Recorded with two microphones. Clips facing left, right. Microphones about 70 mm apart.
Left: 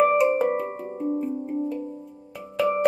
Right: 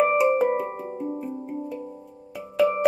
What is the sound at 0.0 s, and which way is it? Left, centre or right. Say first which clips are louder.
Music: even; centre.